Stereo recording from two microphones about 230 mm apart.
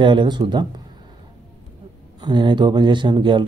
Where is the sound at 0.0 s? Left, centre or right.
Right.